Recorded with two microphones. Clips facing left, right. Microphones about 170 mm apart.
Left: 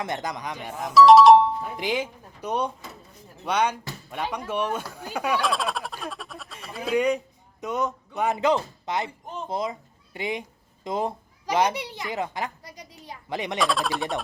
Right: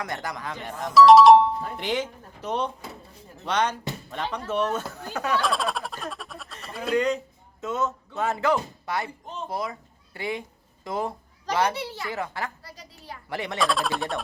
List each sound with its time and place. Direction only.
0.0 s a child's voice: 20° left (ahead or behind); by 1.7 s centre (ahead or behind)
1.7 s a child's voice: 10° left (ahead or behind)
5.4 s a sound: centre (ahead or behind)
6.9 s a child's voice: 10° left (ahead or behind)
13.6 s speech: centre (ahead or behind)